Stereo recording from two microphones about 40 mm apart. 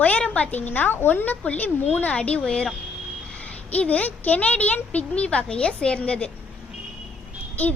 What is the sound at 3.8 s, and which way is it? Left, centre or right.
Speech, left.